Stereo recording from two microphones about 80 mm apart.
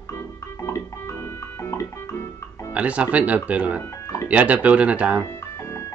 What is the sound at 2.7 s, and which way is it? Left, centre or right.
Speech, centre.